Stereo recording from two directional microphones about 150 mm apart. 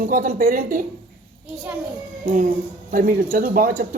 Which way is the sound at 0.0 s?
70° right (ahead or behind).